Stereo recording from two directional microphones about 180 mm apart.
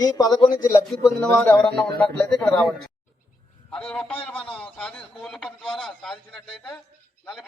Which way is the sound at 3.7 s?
5° left (ahead or behind).